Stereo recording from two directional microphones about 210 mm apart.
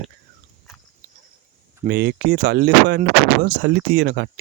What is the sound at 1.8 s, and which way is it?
Speech, 50° right (ahead or behind).